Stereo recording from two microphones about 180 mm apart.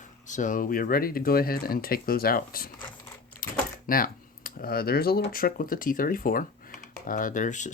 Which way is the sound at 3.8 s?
50° left (ahead or behind).